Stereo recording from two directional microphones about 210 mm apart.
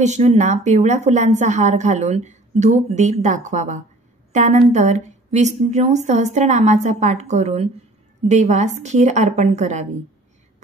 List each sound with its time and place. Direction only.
0.0 s a woman's voice: 35° right (ahead or behind)